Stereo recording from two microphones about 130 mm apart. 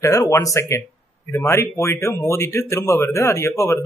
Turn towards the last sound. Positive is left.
turn(degrees=20)  # may be behind; listen again after turning